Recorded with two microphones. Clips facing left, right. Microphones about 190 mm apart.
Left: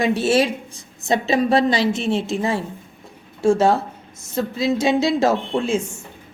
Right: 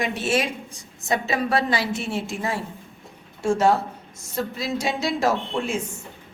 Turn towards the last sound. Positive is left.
turn(degrees=25)  # may be behind; listen again after turning